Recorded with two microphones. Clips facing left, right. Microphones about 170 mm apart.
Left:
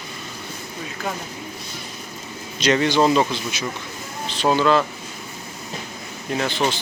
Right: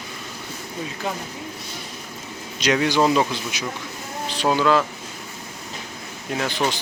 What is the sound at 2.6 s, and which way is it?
A man's voice, 10° right (ahead or behind).